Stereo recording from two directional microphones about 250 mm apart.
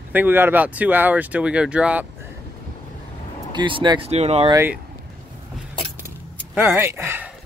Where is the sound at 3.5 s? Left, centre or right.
Centre.